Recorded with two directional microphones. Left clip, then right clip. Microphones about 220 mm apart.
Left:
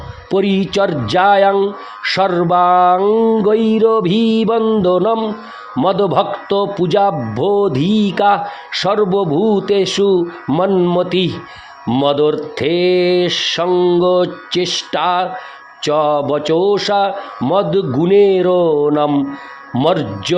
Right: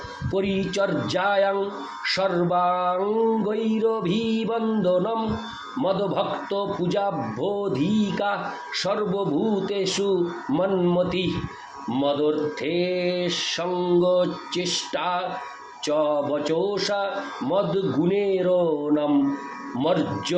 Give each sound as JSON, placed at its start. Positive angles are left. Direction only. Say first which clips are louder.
{"t": 0.3, "sound": "a man's voice", "louder": "left 10 dB", "side_deg": 50}